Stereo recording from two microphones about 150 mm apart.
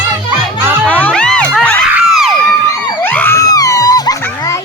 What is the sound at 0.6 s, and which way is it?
Music, 10° right (ahead or behind).